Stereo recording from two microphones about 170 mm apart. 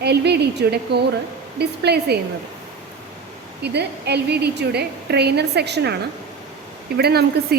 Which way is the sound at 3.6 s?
80° right.